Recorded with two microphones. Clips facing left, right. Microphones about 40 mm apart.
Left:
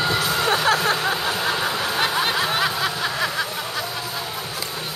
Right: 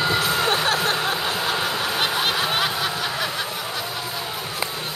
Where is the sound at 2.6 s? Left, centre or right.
Centre.